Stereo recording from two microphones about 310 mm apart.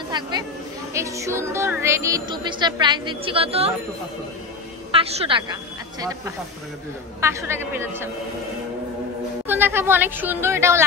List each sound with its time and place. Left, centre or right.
0.1 s speech: centre
4.9 s a woman's voice: centre
9.5 s speech: centre